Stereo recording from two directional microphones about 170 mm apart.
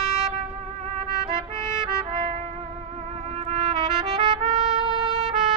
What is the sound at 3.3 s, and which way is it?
Trumpet, 35° right (ahead or behind).